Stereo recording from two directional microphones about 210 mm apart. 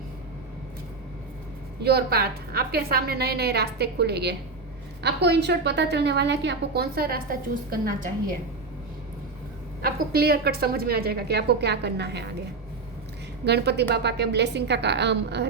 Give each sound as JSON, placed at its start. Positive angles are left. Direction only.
{"t": 1.8, "sound": "a woman's voice", "side_deg": -50}
{"t": 9.8, "sound": "a woman's voice", "side_deg": -50}
{"t": 13.4, "sound": "a woman's voice", "side_deg": -50}